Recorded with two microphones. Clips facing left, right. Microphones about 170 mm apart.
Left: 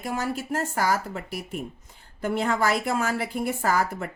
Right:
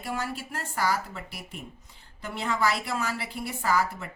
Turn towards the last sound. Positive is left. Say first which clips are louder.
# left 2 dB
turn(degrees=50)  # may be behind; listen again after turning